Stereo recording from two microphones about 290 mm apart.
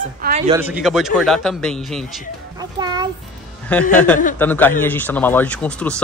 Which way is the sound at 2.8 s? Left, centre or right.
Centre.